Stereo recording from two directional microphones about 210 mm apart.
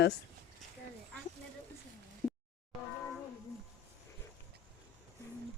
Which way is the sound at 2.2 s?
10° left (ahead or behind).